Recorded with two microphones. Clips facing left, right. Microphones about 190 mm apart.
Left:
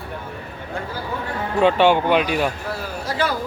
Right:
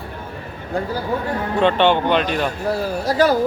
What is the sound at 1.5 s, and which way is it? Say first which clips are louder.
Speech: left 1 dB; 5° left (ahead or behind).